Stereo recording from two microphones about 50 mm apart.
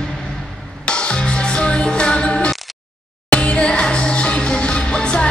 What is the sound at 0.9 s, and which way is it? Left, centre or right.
Music, centre.